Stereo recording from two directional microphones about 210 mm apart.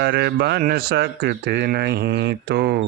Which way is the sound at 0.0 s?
50° right (ahead or behind).